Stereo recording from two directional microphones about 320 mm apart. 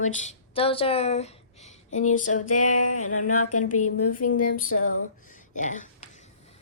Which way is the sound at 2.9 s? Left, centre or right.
Left.